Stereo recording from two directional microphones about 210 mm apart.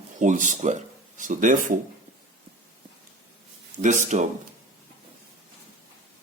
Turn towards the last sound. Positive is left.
turn(degrees=-35)  # may be behind; listen again after turning